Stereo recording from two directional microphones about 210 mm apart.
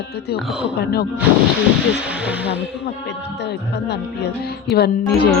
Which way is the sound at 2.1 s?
5° right (ahead or behind).